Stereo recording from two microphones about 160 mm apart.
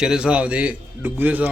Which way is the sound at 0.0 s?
5° right (ahead or behind).